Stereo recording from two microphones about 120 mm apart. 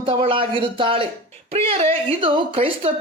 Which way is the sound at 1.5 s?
55° right (ahead or behind).